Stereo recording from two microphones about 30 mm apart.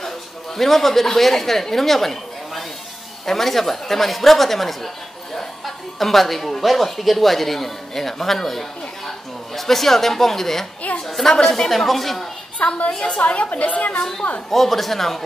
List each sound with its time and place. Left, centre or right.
0.6 s a woman's voice: centre
11.7 s a woman's voice: centre
12.6 s a woman's voice: left
13.9 s speech: centre